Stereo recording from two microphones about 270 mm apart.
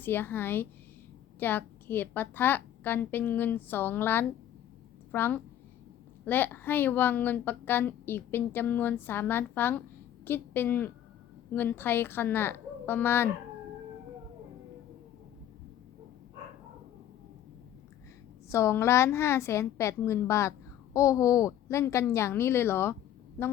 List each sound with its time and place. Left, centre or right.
0.0 s a woman's voice: centre
18.4 s a woman's voice: centre